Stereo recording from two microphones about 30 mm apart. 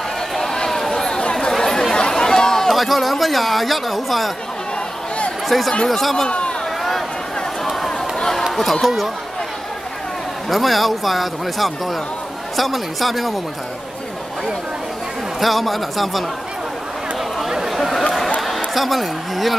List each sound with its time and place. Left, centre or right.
0.7 s chatter: centre
2.7 s speech: centre
5.5 s speech: centre
6.2 s speech: left
8.8 s speech: centre
10.5 s speech: centre
15.4 s speech: centre
17.5 s a sound: centre
17.7 s a sound: centre
18.8 s speech: centre